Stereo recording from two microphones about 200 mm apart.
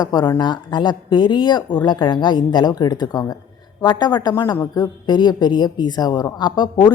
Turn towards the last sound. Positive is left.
turn(degrees=20)  # may be behind; listen again after turning